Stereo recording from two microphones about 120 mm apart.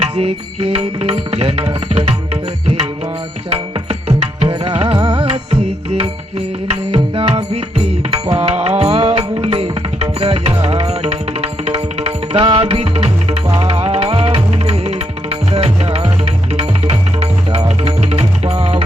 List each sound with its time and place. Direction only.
0.2 s tabla: 55° right (ahead or behind)
2.0 s music: 55° right (ahead or behind)
4.4 s music: 50° right (ahead or behind)
9.0 s tabla: 45° right (ahead or behind)
13.5 s music: 55° right (ahead or behind)